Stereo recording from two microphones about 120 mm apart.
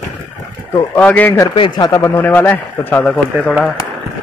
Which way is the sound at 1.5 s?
45° left (ahead or behind).